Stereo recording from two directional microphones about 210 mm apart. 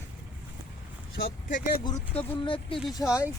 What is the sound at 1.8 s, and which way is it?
Speech, 20° left (ahead or behind).